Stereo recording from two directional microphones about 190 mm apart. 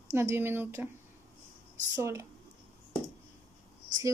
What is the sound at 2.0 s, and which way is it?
Speech, 15° right (ahead or behind).